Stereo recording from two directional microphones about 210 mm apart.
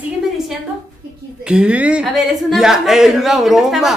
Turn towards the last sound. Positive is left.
turn(degrees=0)  # may be behind; listen again after turning